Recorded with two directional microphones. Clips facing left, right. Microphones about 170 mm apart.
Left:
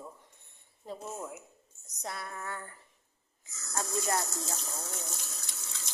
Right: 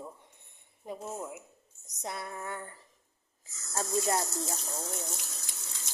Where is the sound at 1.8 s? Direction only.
20° right (ahead or behind).